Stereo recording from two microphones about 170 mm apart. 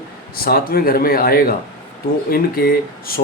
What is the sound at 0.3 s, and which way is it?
Speech, 60° left (ahead or behind).